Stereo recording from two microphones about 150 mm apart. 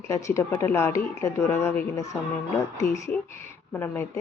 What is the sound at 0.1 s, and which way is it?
Speech, 20° left (ahead or behind).